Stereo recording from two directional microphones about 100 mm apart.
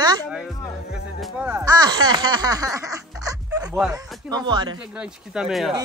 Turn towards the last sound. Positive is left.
turn(degrees=0)  # may be behind; listen again after turning